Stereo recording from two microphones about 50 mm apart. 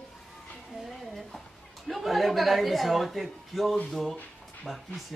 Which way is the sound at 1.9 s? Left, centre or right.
Centre.